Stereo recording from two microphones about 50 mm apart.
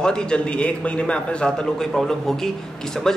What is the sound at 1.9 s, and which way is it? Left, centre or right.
A man's voice, centre.